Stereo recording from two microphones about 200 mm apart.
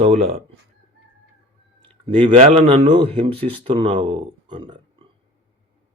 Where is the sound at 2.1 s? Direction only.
30° right (ahead or behind).